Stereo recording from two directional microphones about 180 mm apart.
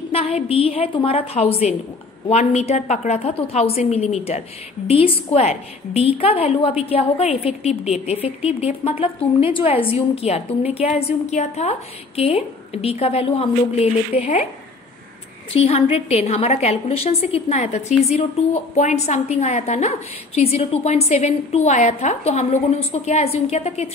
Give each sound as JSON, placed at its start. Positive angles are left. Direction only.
{"t": 0.1, "sound": "a woman's voice", "side_deg": 30}
{"t": 15.5, "sound": "a woman's voice", "side_deg": 35}